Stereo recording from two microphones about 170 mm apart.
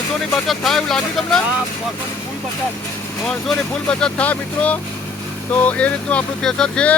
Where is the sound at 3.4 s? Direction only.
5° left (ahead or behind).